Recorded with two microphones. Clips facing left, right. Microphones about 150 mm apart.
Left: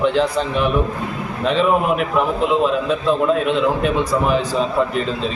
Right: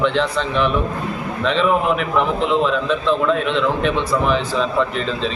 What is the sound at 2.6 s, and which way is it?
Speech, 45° left (ahead or behind).